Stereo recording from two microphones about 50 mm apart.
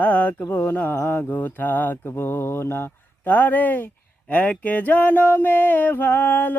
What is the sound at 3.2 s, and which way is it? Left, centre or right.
Mantra, left.